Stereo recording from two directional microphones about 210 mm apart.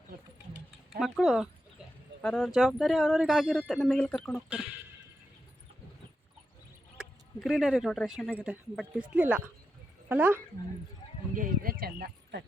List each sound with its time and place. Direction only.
0.9 s speech: centre (ahead or behind)
6.9 s a woman's voice: centre (ahead or behind)
11.3 s speech: 45° right (ahead or behind)